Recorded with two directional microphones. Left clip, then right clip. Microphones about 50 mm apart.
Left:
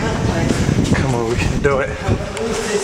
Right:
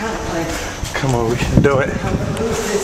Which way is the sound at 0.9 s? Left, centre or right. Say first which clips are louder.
Right 5 dB; right.